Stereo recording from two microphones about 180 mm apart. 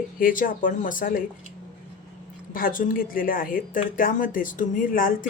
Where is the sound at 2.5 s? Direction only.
50° left (ahead or behind).